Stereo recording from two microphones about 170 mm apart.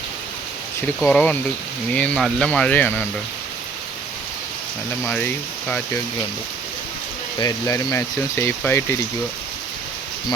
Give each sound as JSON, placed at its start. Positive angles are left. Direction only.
{"t": 1.0, "sound": "speech", "side_deg": 10}
{"t": 5.0, "sound": "speech", "side_deg": 10}
{"t": 7.3, "sound": "speech", "side_deg": 20}